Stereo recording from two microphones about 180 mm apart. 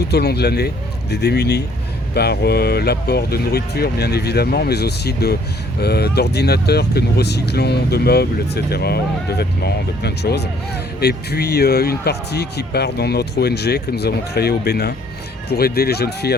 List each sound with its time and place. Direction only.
0.1 s speech: 65° left (ahead or behind)